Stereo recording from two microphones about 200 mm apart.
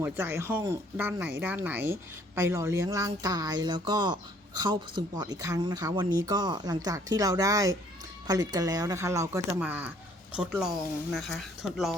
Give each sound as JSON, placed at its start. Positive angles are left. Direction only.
{"t": 0.0, "sound": "speech", "side_deg": -10}